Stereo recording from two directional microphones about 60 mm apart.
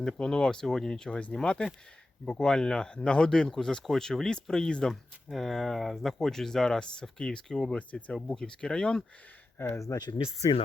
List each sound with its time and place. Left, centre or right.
0.0 s speech: centre
9.6 s speech: left